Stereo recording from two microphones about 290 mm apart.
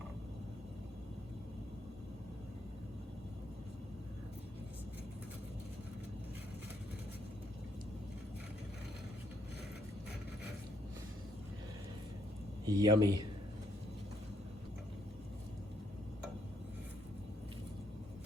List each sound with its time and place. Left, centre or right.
12.6 s speech: centre